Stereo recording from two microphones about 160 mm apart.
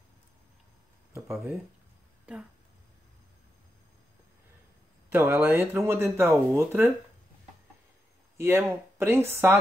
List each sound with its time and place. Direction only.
1.1 s speech: 20° right (ahead or behind)
5.1 s speech: 15° right (ahead or behind)
8.4 s speech: 15° right (ahead or behind)